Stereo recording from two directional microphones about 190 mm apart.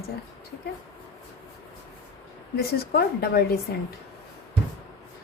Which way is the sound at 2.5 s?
55° left (ahead or behind).